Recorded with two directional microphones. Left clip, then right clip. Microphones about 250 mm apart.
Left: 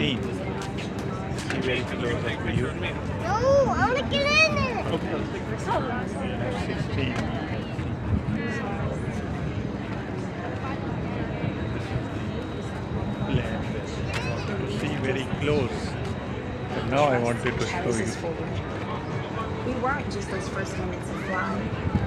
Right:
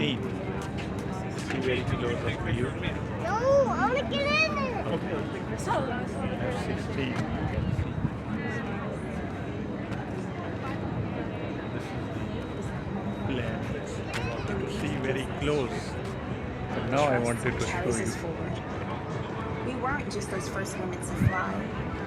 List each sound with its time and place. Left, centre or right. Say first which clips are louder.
3.2 s a child's voice: left 3 dB; centre; by 4.7 s left
14.8 s speech: left 3 dB; centre
16.9 s a man's voice: left 3 dB; centre